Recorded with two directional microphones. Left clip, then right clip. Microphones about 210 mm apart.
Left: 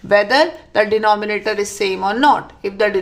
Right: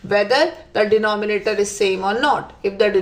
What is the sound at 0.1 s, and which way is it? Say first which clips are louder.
A woman's voice: left 3 dB; 25° left (ahead or behind).